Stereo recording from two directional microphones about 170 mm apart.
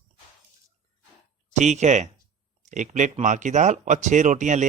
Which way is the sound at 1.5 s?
45° right (ahead or behind).